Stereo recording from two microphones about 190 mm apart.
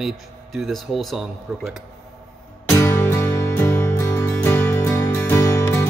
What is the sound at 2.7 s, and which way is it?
Music, 15° left (ahead or behind).